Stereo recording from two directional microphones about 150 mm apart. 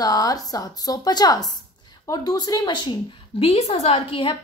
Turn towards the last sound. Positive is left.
turn(degrees=35)  # may be behind; listen again after turning